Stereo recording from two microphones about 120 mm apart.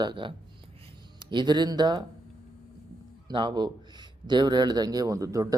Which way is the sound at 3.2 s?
40° right (ahead or behind).